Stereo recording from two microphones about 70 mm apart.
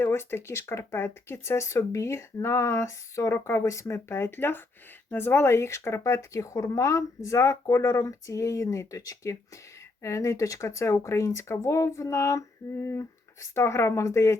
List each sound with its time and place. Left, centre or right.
0.0 s speech: left